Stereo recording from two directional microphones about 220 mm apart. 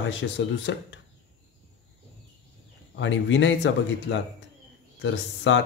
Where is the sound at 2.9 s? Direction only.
55° left (ahead or behind).